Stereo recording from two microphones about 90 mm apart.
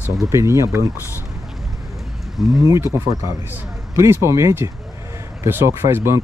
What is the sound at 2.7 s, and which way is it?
Speech, 35° right (ahead or behind).